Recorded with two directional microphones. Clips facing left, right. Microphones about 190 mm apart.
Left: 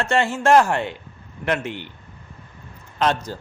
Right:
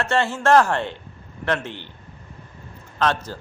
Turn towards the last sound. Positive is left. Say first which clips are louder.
# left 1 dB
turn(degrees=15)  # may be behind; listen again after turning